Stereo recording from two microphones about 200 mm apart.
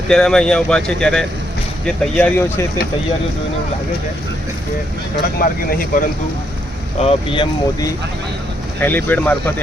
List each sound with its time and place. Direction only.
0.1 s speech: 5° left (ahead or behind)
5.4 s speech: 45° left (ahead or behind)
7.0 s speech: 30° left (ahead or behind)
8.8 s speech: 10° left (ahead or behind)